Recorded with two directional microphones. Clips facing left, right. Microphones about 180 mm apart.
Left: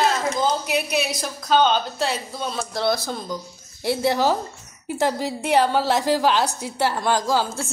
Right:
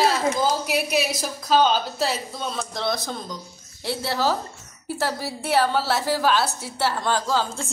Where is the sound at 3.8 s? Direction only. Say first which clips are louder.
Left 4 dB; 15° left (ahead or behind).